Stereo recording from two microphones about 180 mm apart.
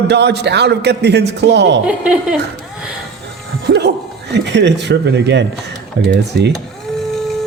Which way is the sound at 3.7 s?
70° right (ahead or behind).